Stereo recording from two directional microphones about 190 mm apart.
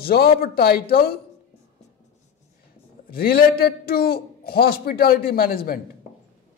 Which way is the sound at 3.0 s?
50° left (ahead or behind).